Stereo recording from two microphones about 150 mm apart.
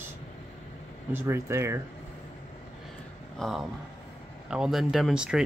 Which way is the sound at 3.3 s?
Centre (ahead or behind).